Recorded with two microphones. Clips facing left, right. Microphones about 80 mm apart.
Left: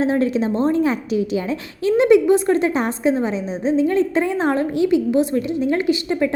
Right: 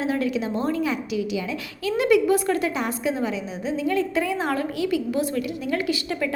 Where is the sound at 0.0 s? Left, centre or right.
Left.